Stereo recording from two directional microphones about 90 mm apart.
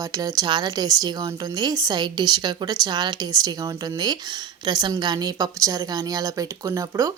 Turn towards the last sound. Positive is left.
turn(degrees=-40)  # may be behind; listen again after turning